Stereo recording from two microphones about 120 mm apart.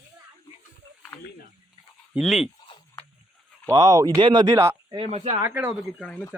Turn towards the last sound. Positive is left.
turn(degrees=-20)  # may be behind; listen again after turning